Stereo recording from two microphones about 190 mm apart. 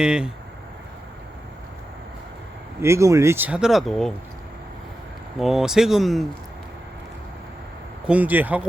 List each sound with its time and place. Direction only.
0.0 s speech: 5° right (ahead or behind)
2.8 s speech: 15° right (ahead or behind); by 4.1 s centre (ahead or behind)
5.4 s speech: centre (ahead or behind)
8.0 s speech: 5° right (ahead or behind)